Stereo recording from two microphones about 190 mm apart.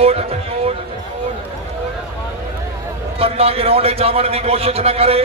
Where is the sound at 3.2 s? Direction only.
30° right (ahead or behind).